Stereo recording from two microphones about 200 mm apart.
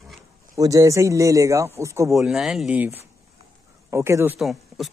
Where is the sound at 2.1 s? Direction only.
Centre (ahead or behind).